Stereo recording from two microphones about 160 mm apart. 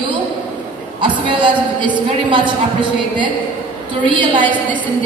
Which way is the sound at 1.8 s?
30° right (ahead or behind).